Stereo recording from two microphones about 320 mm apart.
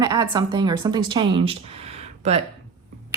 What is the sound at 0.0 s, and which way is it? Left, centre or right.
Speech, centre.